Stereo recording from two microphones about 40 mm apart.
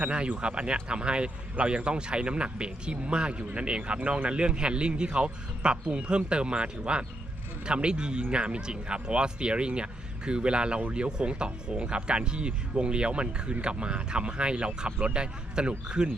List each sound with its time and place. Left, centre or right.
0.0 s speech: right